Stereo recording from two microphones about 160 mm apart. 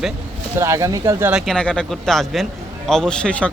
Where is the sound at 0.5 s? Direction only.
20° right (ahead or behind).